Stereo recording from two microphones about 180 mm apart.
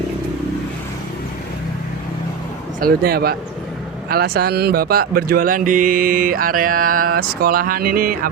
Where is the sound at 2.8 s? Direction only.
55° right (ahead or behind).